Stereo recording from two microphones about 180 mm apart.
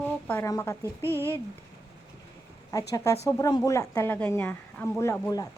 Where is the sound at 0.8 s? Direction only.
15° right (ahead or behind).